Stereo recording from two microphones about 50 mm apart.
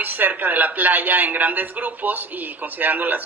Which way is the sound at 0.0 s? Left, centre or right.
Right.